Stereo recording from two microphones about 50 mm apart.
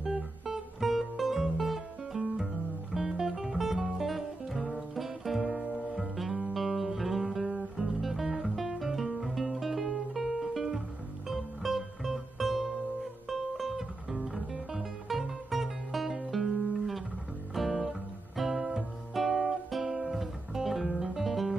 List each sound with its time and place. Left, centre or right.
0.0 s music: centre
7.5 s guitar: centre
11.2 s music: centre
17.6 s guitar: centre
19.7 s music: centre